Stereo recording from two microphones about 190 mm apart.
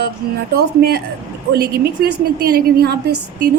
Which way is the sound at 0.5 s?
55° right (ahead or behind).